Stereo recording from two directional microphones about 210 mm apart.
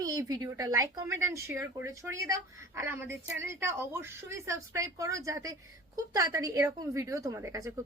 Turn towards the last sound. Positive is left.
turn(degrees=-15)  # may be behind; listen again after turning